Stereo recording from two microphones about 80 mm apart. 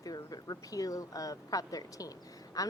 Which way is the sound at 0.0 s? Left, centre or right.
Left.